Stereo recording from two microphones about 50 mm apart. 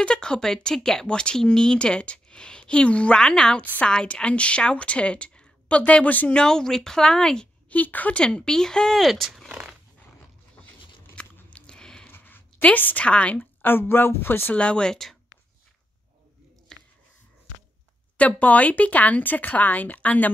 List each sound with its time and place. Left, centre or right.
0.1 s a woman's voice: centre
6.3 s a woman's voice: centre
7.7 s speech: left
8.2 s a woman's voice: centre
11.2 s biting: left
12.1 s a sound: left
12.6 s speech: left
13.0 s a woman's voice: left
13.4 s a woman's voice: left
14.5 s a woman's voice: left
16.7 s a sound: centre
18.1 s speech: left